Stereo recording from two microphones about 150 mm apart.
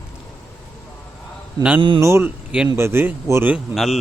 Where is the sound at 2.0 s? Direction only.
20° right (ahead or behind).